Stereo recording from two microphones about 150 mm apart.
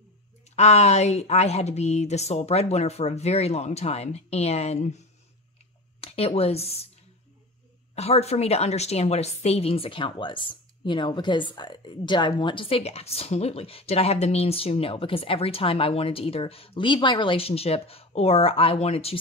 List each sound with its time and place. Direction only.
0.6 s a woman's voice: 50° left (ahead or behind)
7.9 s a woman's voice: 45° left (ahead or behind)